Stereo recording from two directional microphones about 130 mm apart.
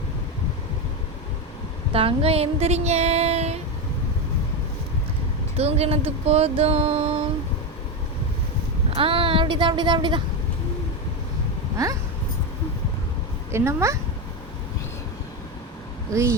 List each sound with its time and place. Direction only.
1.9 s speech: 45° right (ahead or behind)
5.5 s speech: 50° right (ahead or behind)
9.0 s speech: 45° right (ahead or behind)
13.5 s speech: 20° right (ahead or behind)
16.1 s speech: 25° right (ahead or behind)